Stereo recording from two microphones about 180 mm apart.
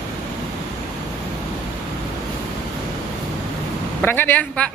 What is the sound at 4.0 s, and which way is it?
Speech, 10° left (ahead or behind).